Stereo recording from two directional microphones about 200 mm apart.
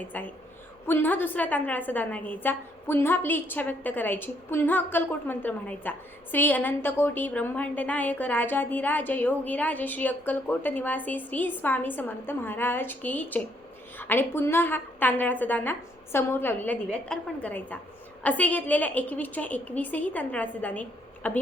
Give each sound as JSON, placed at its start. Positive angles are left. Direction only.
{"t": 0.0, "sound": "a woman's voice", "side_deg": 10}